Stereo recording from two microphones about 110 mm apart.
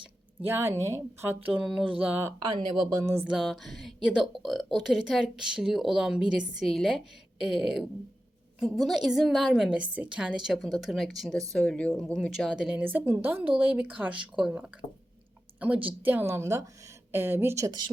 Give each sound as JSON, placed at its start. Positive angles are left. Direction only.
{"t": 0.4, "sound": "a woman's voice", "side_deg": -20}
{"t": 1.6, "sound": "speech", "side_deg": -5}
{"t": 2.4, "sound": "speech", "side_deg": -45}
{"t": 2.9, "sound": "a woman's voice", "side_deg": -25}
{"t": 3.2, "sound": "speech", "side_deg": -5}
{"t": 12.5, "sound": "speech", "side_deg": -5}
{"t": 16.0, "sound": "a woman's voice", "side_deg": -20}
{"t": 17.7, "sound": "speech", "side_deg": -45}